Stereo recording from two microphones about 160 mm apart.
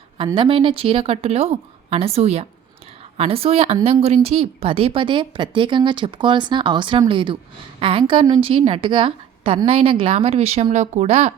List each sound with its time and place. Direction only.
0.3 s a woman's voice: 30° right (ahead or behind)